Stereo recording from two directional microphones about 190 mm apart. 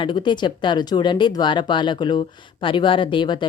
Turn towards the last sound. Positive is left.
turn(degrees=25)  # may be behind; listen again after turning